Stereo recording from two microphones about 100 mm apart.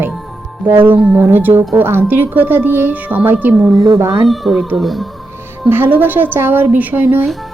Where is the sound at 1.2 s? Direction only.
20° right (ahead or behind).